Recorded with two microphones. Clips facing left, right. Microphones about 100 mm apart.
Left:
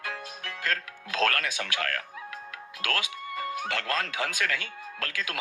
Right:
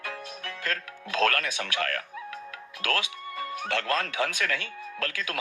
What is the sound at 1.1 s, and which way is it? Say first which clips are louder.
Speech: right 1 dB; 40° right (ahead or behind).